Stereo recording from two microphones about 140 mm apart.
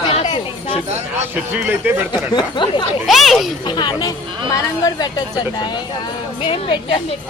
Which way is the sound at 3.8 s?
30° left (ahead or behind).